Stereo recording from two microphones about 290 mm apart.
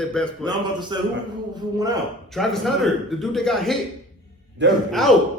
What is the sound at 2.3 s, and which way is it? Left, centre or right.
A man's voice, centre.